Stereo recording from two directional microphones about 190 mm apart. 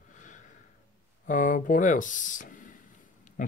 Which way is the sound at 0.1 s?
40° left (ahead or behind).